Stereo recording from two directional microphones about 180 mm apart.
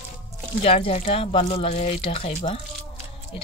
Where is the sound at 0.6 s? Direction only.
30° left (ahead or behind).